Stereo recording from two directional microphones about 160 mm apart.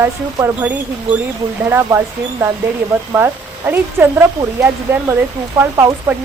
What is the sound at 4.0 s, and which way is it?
Speech, 5° right (ahead or behind).